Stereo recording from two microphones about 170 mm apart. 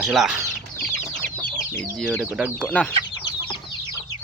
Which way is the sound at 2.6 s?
5° left (ahead or behind).